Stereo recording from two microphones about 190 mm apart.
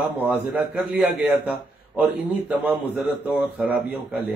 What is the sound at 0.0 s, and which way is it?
A man's voice, 10° right (ahead or behind).